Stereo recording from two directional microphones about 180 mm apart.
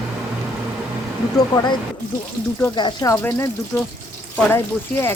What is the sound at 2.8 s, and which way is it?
Speech, 25° left (ahead or behind).